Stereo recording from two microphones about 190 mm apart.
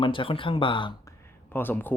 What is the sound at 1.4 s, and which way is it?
Speech, 10° left (ahead or behind).